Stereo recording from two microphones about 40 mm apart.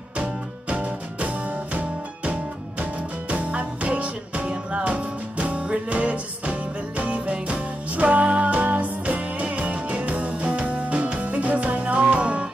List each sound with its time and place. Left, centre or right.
0.2 s music: right